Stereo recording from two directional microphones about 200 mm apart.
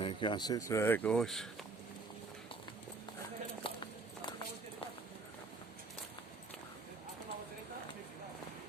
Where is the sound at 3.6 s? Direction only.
25° left (ahead or behind).